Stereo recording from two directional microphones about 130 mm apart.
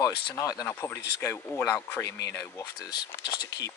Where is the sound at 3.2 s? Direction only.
35° left (ahead or behind).